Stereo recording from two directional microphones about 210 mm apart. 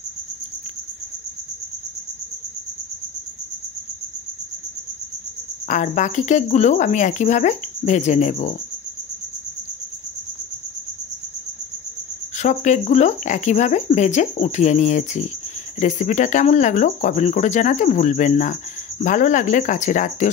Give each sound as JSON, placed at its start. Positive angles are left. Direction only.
{"t": 5.7, "sound": "speech", "side_deg": 35}
{"t": 12.4, "sound": "speech", "side_deg": 35}